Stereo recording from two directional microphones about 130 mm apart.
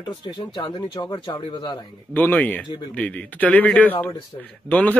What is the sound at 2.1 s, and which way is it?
Speech, 15° left (ahead or behind).